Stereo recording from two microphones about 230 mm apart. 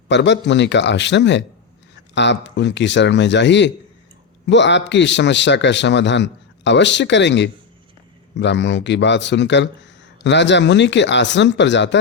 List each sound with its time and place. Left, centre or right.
0.1 s speech: left